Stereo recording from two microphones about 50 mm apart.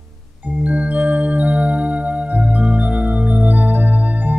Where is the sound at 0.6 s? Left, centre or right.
Right.